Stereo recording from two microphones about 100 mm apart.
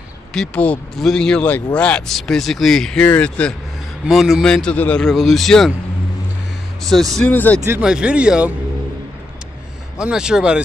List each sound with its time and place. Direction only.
0.3 s a man's voice: 5° left (ahead or behind)
4.1 s a man's voice: centre (ahead or behind)
6.8 s speech: centre (ahead or behind)
7.3 s speech: 15° left (ahead or behind)
7.8 s speech: 10° right (ahead or behind)
9.9 s speech: 10° right (ahead or behind)